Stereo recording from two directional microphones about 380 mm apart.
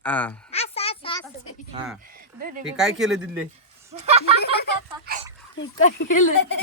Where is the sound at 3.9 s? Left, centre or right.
Centre.